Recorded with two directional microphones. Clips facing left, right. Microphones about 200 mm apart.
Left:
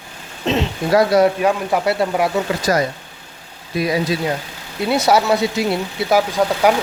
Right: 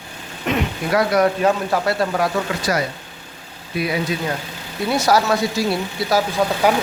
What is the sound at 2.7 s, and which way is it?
Speech, 35° left (ahead or behind).